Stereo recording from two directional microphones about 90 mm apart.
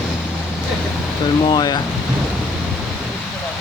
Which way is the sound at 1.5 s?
50° left (ahead or behind).